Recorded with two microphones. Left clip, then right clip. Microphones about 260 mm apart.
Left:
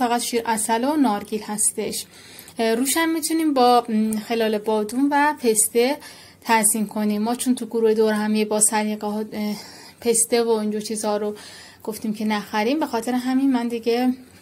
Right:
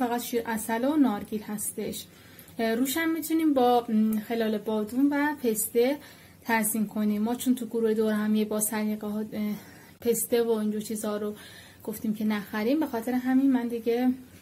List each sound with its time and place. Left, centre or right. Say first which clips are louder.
0.0 s a woman's voice: left 7 dB; left